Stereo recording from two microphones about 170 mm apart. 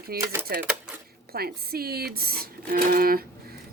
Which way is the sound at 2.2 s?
60° right (ahead or behind).